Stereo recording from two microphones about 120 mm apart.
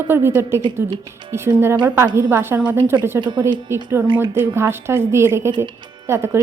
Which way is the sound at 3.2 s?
40° right (ahead or behind).